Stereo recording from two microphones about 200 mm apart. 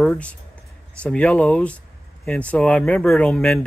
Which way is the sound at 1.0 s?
5° left (ahead or behind).